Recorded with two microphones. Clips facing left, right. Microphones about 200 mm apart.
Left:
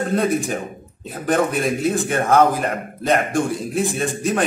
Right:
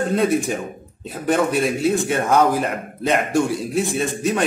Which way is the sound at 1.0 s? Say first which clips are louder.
Even; centre (ahead or behind).